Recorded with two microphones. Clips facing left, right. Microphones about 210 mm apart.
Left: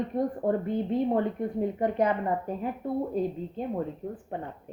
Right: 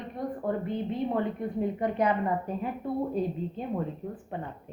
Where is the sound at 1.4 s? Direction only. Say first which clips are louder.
Left 2 dB; 45° left (ahead or behind).